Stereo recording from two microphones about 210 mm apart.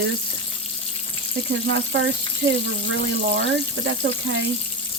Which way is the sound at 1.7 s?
60° right (ahead or behind).